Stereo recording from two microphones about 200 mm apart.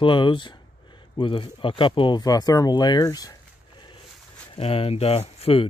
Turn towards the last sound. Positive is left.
turn(degrees=30)  # may be behind; listen again after turning